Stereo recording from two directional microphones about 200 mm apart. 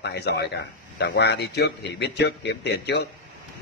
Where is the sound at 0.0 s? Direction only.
55° left (ahead or behind).